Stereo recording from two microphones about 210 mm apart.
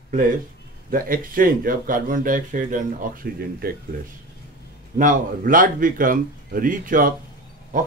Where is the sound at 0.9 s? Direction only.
40° right (ahead or behind).